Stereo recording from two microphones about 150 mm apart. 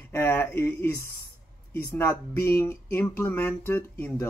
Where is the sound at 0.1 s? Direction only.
15° left (ahead or behind).